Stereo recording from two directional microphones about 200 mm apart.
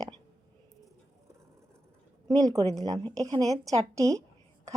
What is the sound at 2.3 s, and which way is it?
A woman's voice, 20° right (ahead or behind).